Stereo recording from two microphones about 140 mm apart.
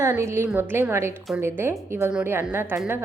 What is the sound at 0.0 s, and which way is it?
A woman's voice, 20° right (ahead or behind).